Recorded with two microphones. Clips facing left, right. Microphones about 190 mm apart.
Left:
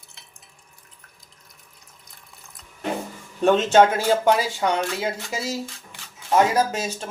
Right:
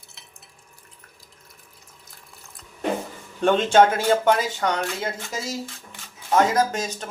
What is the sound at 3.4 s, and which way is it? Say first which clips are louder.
Speech: left 1 dB; 5° left (ahead or behind).